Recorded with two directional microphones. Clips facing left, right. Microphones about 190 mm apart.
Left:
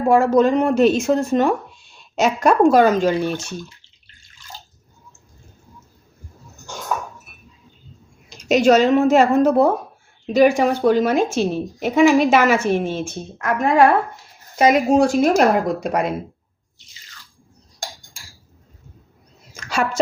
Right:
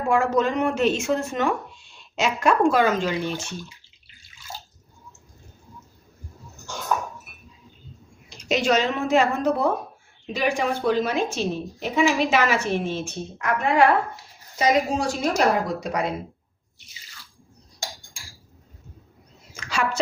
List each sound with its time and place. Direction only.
0.1 s speech: 35° left (ahead or behind)
8.4 s a woman's voice: 45° left (ahead or behind)
14.5 s a woman's voice: 55° left (ahead or behind)
19.5 s a sound: 45° left (ahead or behind)